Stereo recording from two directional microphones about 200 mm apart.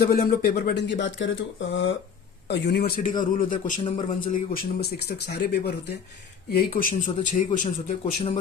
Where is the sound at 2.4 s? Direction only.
55° left (ahead or behind); by 8.3 s 35° left (ahead or behind).